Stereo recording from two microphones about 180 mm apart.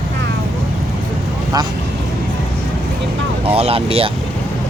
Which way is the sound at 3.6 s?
30° right (ahead or behind).